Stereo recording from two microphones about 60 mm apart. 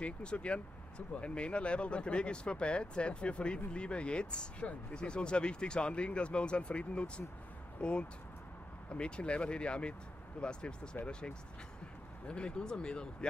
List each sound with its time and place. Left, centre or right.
0.0 s speech: centre